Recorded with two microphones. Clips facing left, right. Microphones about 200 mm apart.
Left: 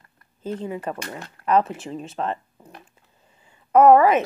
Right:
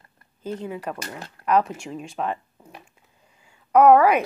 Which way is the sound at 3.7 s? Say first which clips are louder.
Left 1 dB; centre (ahead or behind).